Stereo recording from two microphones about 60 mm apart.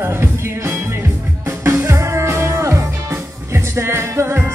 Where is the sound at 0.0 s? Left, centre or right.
Right.